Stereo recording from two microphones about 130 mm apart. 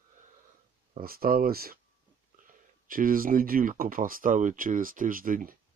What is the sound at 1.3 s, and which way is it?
Speech, 90° right.